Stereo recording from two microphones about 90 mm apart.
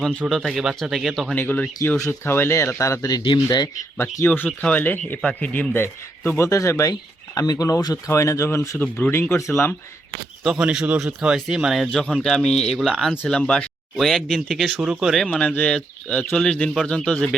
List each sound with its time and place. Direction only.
0.3 s a man's voice: centre (ahead or behind)
1.4 s a man's voice: 20° left (ahead or behind); by 3.8 s 50° left (ahead or behind)
3.9 s a man's voice: 25° left (ahead or behind)
8.8 s a man's voice: 20° left (ahead or behind)
10.4 s a man's voice: 10° right (ahead or behind)
14.8 s speech: 10° right (ahead or behind)
15.1 s speech: 5° left (ahead or behind)